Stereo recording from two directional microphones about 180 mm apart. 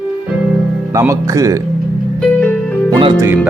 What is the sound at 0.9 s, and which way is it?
Speech, 15° right (ahead or behind).